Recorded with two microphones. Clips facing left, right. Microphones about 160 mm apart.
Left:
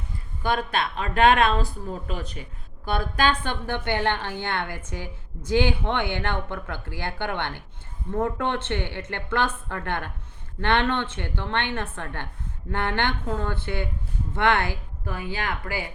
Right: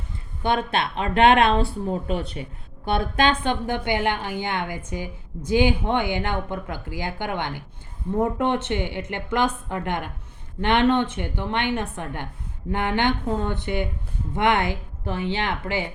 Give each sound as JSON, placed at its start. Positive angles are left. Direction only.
{"t": 0.4, "sound": "a woman's voice", "side_deg": -25}